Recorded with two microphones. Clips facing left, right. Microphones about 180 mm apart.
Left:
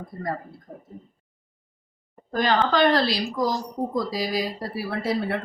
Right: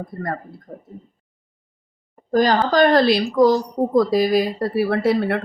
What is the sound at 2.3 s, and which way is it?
Speech, 40° right (ahead or behind).